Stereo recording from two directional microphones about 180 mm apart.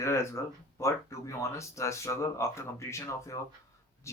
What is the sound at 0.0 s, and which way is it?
Speech, 15° left (ahead or behind).